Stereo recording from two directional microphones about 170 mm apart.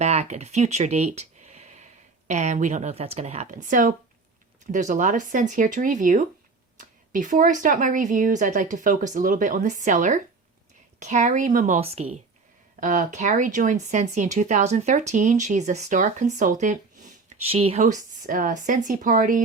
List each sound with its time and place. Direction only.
0.0 s speech: 40° right (ahead or behind)
12.8 s speech: 50° right (ahead or behind)